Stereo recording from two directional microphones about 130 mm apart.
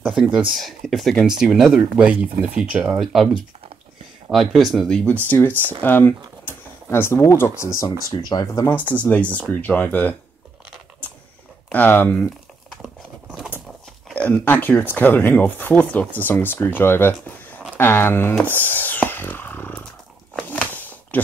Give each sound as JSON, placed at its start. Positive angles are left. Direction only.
{"t": 0.0, "sound": "speech", "side_deg": -5}
{"t": 8.9, "sound": "speech", "side_deg": 10}
{"t": 11.7, "sound": "speech", "side_deg": 15}
{"t": 14.3, "sound": "speech", "side_deg": 15}
{"t": 20.3, "sound": "a sound", "side_deg": 15}